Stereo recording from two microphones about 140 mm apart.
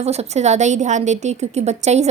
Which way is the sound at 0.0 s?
50° right (ahead or behind).